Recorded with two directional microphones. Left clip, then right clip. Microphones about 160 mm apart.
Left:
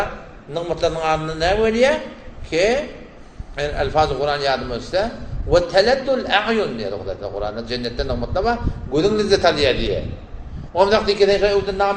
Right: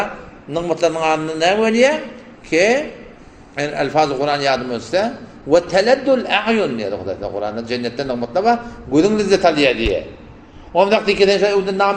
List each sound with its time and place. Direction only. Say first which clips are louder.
0.5 s a man's voice: right 3 dB; 65° right (ahead or behind)